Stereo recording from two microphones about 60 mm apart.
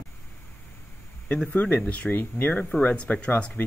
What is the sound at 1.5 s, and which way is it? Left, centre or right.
Speech, left.